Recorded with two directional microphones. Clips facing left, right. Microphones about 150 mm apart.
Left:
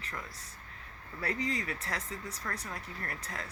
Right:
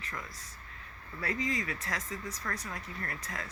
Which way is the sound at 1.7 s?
30° left (ahead or behind).